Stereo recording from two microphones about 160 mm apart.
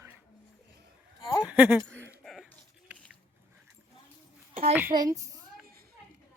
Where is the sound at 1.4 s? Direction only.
5° right (ahead or behind).